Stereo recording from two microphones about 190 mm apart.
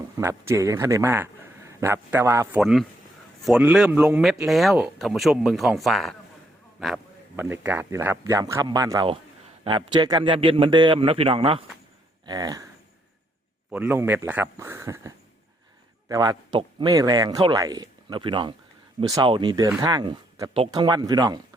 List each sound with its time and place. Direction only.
0.2 s speech: 15° right (ahead or behind)
2.6 s a man's voice: centre (ahead or behind); by 12.6 s 20° right (ahead or behind)
13.7 s speech: 5° right (ahead or behind)